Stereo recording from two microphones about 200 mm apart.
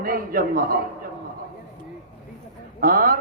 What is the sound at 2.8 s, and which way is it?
Speech, 45° right (ahead or behind).